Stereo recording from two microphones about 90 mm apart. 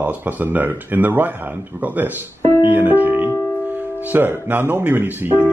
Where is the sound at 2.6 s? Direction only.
20° right (ahead or behind).